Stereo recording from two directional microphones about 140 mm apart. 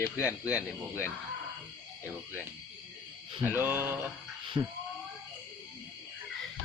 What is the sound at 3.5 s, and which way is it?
Speech, 10° right (ahead or behind).